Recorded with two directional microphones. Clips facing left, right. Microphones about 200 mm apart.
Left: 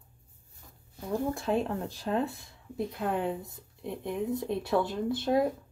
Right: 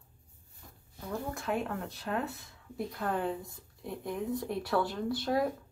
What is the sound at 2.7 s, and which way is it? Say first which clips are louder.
A woman's voice: left 3 dB; 20° left (ahead or behind).